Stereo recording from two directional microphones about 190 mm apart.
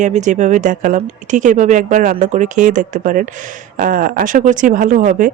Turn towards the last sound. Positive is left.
turn(degrees=-40)  # may be behind; listen again after turning